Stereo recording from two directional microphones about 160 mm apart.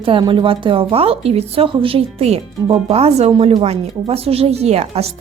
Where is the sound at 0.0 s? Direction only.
30° right (ahead or behind).